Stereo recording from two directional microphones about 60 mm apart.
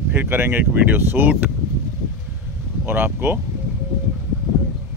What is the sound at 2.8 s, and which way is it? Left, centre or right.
Speech, right.